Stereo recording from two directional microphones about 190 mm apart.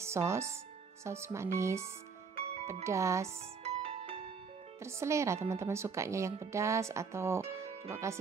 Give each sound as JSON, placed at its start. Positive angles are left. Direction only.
{"t": 0.0, "sound": "speech", "side_deg": -15}
{"t": 3.6, "sound": "music", "side_deg": -30}
{"t": 4.8, "sound": "speech", "side_deg": -15}